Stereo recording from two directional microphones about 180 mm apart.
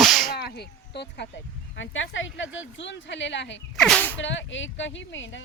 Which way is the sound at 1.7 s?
90° left.